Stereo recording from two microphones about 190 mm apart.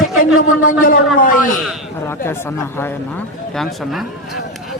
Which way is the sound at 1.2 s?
45° left (ahead or behind).